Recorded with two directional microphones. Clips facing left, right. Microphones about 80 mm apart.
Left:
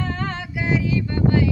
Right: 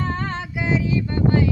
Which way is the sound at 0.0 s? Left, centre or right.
Right.